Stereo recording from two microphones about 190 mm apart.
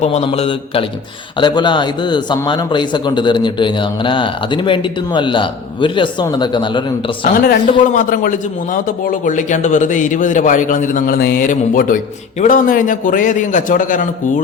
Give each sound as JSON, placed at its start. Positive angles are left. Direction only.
{"t": 0.0, "sound": "a man's voice", "side_deg": 35}
{"t": 7.4, "sound": "a man's voice", "side_deg": 45}